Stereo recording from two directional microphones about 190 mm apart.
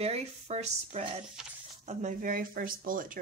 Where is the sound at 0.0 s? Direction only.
35° right (ahead or behind).